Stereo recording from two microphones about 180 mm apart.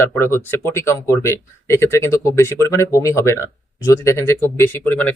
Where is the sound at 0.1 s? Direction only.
15° left (ahead or behind).